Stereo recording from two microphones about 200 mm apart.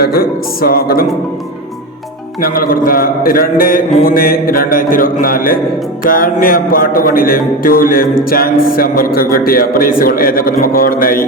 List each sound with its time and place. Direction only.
0.0 s speech: 50° left (ahead or behind)
2.4 s speech: 45° left (ahead or behind)